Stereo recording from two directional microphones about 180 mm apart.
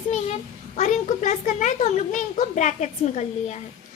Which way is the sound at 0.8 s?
45° left (ahead or behind).